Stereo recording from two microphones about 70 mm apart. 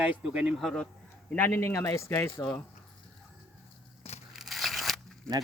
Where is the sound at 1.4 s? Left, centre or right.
Left.